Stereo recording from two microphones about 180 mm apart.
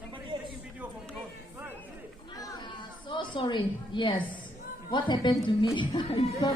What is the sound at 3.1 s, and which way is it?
A woman's voice, 25° left (ahead or behind).